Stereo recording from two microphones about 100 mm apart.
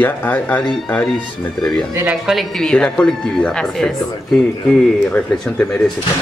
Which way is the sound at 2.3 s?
Centre (ahead or behind).